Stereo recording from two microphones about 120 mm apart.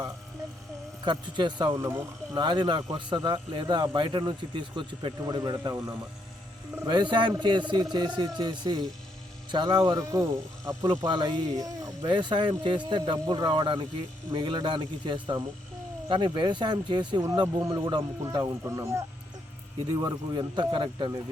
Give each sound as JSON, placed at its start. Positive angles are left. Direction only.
{"t": 1.0, "sound": "speech", "side_deg": -40}
{"t": 1.7, "sound": "speech", "side_deg": -25}
{"t": 2.4, "sound": "speech", "side_deg": -40}
{"t": 6.8, "sound": "speech", "side_deg": -40}
{"t": 11.0, "sound": "speech", "side_deg": -40}
{"t": 19.9, "sound": "speech", "side_deg": -35}